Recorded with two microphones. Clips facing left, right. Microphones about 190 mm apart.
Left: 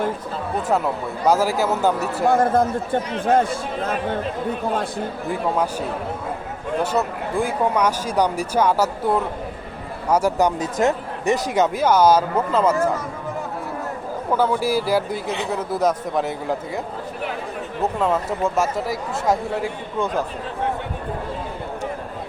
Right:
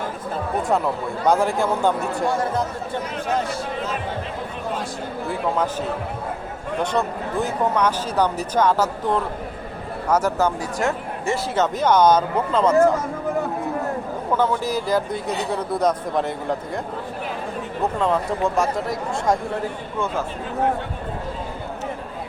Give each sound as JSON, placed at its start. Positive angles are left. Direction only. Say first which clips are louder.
{"t": 1.3, "sound": "speech", "louder": "left 1 dB", "side_deg": 5}
{"t": 2.2, "sound": "a man's voice", "louder": "left 7 dB", "side_deg": 55}
{"t": 6.8, "sound": "speech", "louder": "right 1 dB", "side_deg": 10}
{"t": 14.3, "sound": "speech", "louder": "left 2 dB", "side_deg": 10}
{"t": 18.0, "sound": "speech", "louder": "even", "side_deg": 5}